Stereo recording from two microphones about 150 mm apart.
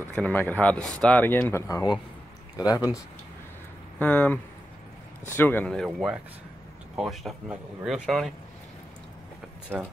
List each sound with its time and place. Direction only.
0.0 s speech: 15° left (ahead or behind)
4.0 s speech: 10° left (ahead or behind)
5.9 s speech: 5° right (ahead or behind)
9.7 s speech: 5° right (ahead or behind)